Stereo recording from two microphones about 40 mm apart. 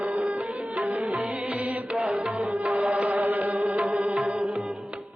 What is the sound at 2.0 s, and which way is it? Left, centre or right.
Tabla, right.